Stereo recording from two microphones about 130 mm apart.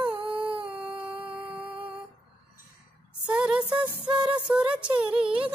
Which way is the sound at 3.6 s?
40° right (ahead or behind).